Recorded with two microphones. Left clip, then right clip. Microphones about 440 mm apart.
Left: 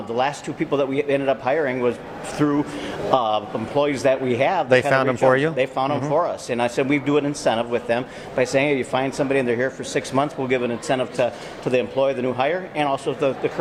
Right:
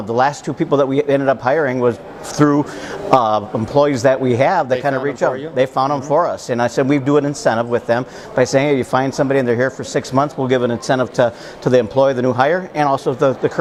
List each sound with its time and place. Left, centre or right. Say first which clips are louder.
0.1 s a man's voice: right 7 dB; right
4.7 s speech: left 1 dB; left
5.5 s a man's voice: right 6 dB; right